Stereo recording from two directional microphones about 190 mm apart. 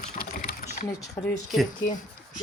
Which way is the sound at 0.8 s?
25° left (ahead or behind).